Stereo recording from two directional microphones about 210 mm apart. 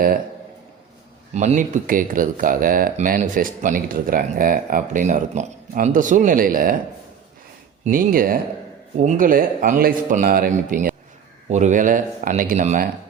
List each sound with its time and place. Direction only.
1.3 s speech: 35° right (ahead or behind)
7.9 s speech: 40° right (ahead or behind)